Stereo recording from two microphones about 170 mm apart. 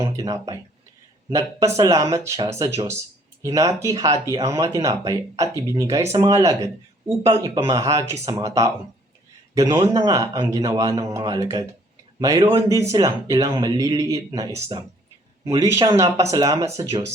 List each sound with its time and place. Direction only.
0.0 s speech: 20° right (ahead or behind)